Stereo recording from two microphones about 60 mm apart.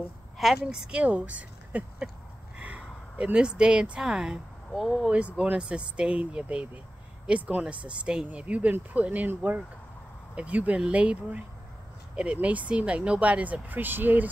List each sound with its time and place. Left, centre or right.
0.7 s speech: centre
1.0 s speech: right; by 5.1 s centre
5.1 s speech: centre
10.3 s speech: right